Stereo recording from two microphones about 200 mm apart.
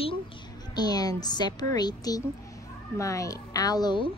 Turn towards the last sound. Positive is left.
turn(degrees=20)  # may be behind; listen again after turning